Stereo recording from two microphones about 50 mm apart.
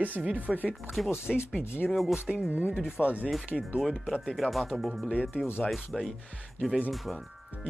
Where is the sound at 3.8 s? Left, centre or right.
Centre.